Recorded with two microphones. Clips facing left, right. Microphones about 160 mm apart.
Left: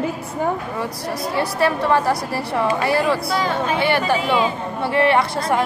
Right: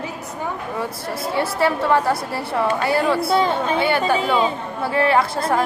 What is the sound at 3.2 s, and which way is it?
Speech, 25° right (ahead or behind).